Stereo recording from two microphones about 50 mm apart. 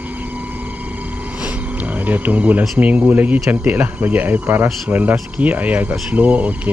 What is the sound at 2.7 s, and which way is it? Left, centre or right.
Speech, right.